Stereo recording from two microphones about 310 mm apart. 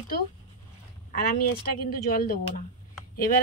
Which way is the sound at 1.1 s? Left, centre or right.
Left.